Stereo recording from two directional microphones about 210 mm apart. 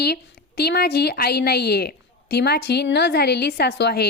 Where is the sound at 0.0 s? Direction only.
50° left (ahead or behind).